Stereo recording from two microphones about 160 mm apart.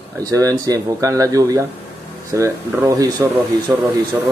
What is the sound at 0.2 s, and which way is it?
Speech, 20° right (ahead or behind).